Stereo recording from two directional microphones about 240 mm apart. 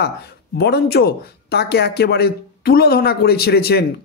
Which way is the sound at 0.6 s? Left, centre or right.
Left.